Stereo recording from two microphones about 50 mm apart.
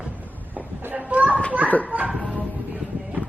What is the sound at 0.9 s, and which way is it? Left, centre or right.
Children playing, right.